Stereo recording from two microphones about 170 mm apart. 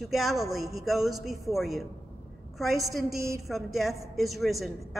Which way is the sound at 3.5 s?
Centre (ahead or behind).